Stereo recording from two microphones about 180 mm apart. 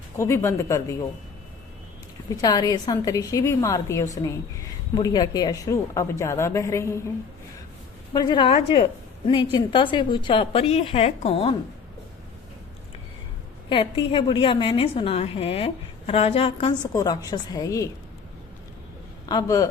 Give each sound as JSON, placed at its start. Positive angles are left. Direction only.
{"t": 0.2, "sound": "a woman's voice", "side_deg": 15}
{"t": 2.3, "sound": "a woman's voice", "side_deg": 20}
{"t": 8.1, "sound": "a woman's voice", "side_deg": 25}
{"t": 13.7, "sound": "a woman's voice", "side_deg": 30}
{"t": 19.2, "sound": "a man's voice", "side_deg": 20}